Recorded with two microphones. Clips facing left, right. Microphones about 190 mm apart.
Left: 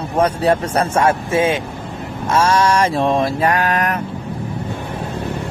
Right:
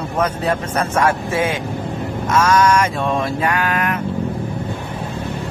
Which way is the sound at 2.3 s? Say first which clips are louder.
Even; 30° left (ahead or behind).